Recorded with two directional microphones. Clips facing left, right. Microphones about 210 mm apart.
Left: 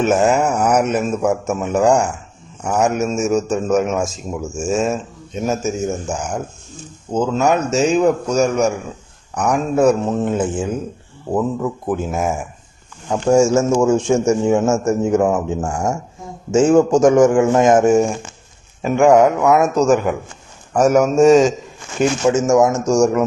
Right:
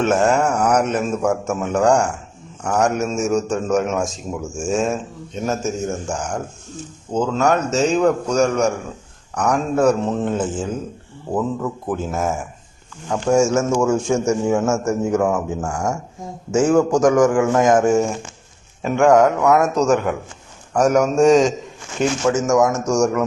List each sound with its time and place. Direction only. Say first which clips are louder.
0.0 s a man's voice: left 2 dB; 5° left (ahead or behind)
13.3 s a man's voice: left 3 dB; 30° left (ahead or behind); by 21.5 s 5° left (ahead or behind)
22.3 s a man's voice: left 3 dB; 30° left (ahead or behind)